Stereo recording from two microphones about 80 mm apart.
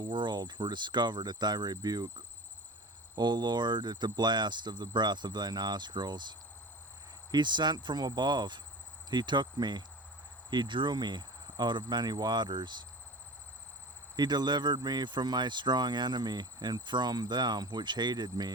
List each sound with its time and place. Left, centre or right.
0.0 s cricket: right
10.5 s cricket: right
14.2 s speech: right